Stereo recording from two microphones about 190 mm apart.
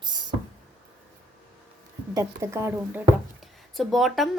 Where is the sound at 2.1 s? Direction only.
15° right (ahead or behind); by 4.3 s centre (ahead or behind).